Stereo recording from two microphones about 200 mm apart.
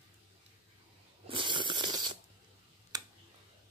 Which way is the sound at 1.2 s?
25° right (ahead or behind).